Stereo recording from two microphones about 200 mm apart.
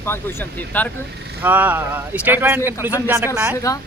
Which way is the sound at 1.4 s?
10° right (ahead or behind).